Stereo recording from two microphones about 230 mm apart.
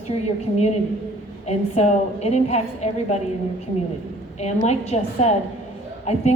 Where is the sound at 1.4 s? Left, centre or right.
Left.